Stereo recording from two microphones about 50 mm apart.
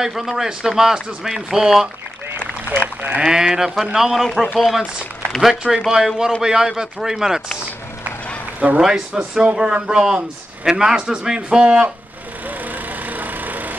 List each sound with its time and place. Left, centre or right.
0.0 s a man's voice: centre
3.2 s a man's voice: centre
8.5 s a man's voice: right
9.1 s a man's voice: centre
11.6 s speech: right
12.4 s wood: right